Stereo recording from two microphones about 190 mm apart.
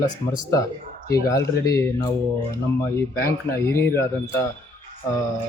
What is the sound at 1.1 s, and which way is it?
Speech, 15° left (ahead or behind).